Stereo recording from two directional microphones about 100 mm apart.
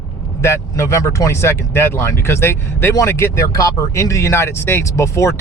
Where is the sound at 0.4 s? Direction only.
25° left (ahead or behind).